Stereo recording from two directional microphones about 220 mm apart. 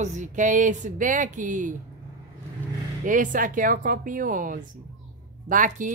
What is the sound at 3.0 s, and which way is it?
Speech, 35° right (ahead or behind).